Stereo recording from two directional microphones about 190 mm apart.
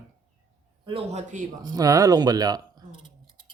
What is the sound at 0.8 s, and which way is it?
Speech, 30° right (ahead or behind).